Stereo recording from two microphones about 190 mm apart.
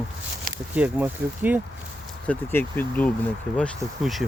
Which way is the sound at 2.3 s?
10° left (ahead or behind).